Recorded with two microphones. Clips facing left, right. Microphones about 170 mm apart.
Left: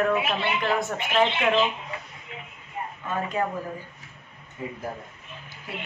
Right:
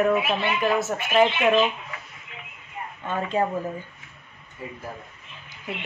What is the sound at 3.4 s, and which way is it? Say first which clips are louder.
Speech: right 4 dB; 30° right (ahead or behind).